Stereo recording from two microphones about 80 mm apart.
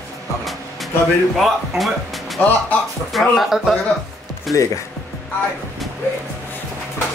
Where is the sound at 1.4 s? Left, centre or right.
Centre.